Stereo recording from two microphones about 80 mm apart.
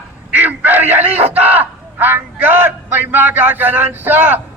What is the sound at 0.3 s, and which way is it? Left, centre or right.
Speech, right.